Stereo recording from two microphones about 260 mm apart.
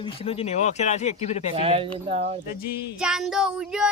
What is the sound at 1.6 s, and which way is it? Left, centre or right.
Speech, right.